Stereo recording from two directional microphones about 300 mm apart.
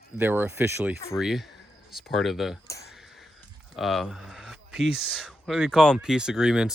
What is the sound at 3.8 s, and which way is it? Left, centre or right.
Speech, centre.